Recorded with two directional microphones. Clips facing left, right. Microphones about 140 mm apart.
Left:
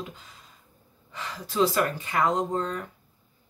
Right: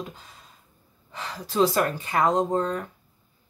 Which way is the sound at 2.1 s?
35° right (ahead or behind).